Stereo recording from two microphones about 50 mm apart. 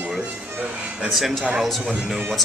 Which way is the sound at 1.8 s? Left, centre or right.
Centre.